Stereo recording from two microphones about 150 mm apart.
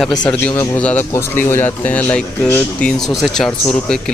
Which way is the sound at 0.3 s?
10° left (ahead or behind).